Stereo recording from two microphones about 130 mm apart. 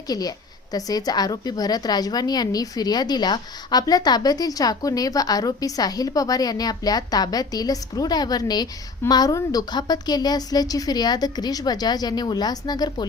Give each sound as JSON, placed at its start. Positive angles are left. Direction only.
{"t": 0.1, "sound": "a woman's voice", "side_deg": 30}